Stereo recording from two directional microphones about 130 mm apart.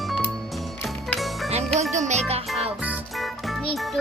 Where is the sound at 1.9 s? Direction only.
65° right (ahead or behind).